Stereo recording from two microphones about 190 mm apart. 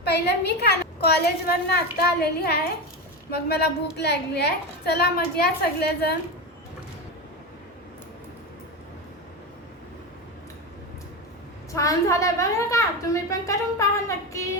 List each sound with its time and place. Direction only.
0.1 s a woman's voice: 60° left (ahead or behind)
11.7 s speech: 15° left (ahead or behind)